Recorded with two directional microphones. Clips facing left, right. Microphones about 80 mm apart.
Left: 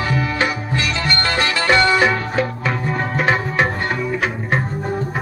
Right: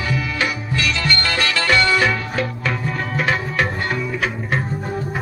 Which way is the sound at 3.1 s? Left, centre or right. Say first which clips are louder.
Left 2 dB; left.